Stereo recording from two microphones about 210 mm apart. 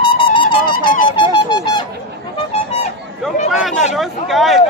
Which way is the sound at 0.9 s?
20° left (ahead or behind).